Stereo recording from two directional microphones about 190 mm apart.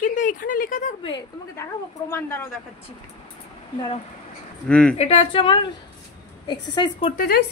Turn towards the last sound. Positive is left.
turn(degrees=55)  # may be behind; listen again after turning